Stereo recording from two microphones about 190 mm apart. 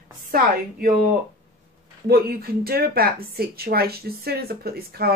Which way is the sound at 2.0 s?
55° right (ahead or behind).